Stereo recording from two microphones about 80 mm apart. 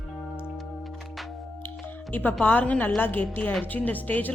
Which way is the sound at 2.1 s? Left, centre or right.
Left.